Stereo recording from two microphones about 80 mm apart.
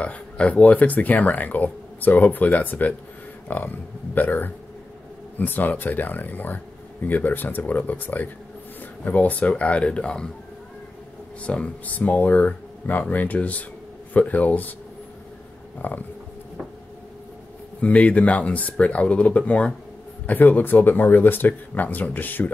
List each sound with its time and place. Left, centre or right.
0.0 s speech: centre
11.4 s speech: centre
15.8 s speech: left
17.7 s speech: centre